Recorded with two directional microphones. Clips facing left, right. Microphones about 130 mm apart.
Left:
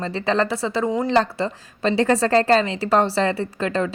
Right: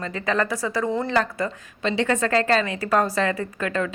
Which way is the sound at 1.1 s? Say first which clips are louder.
Left 3 dB; 35° left (ahead or behind).